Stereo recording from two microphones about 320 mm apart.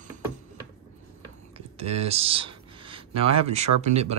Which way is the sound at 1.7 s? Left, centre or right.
Centre.